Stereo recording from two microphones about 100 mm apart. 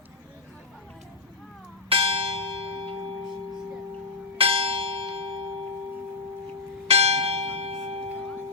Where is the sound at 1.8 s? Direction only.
65° right (ahead or behind).